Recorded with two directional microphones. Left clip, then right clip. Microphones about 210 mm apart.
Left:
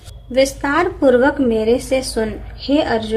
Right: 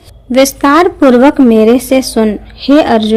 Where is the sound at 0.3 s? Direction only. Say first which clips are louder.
Right 8 dB; 50° right (ahead or behind).